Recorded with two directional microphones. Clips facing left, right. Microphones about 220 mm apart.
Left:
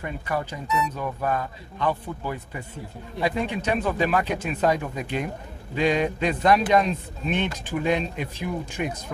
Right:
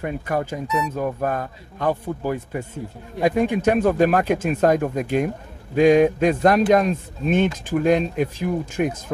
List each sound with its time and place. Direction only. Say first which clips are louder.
0.0 s speech: right 5 dB; 50° right (ahead or behind)